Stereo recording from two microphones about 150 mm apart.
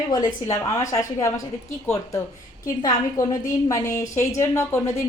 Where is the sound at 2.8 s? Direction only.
25° left (ahead or behind).